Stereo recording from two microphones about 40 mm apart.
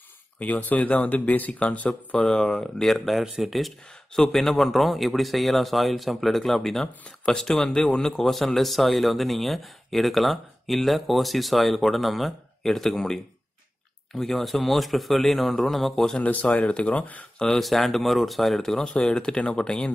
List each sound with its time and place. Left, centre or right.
0.4 s speech: left
2.2 s speech: centre
2.9 s speech: centre
4.1 s speech: centre
14.1 s speech: centre
16.2 s speech: left
17.6 s speech: centre
18.9 s speech: left